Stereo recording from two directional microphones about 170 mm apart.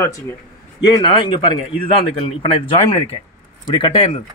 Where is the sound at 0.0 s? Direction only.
15° left (ahead or behind).